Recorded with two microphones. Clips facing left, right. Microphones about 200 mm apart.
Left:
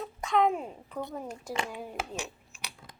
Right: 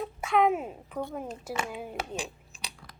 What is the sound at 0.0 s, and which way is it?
A child's voice, 10° right (ahead or behind).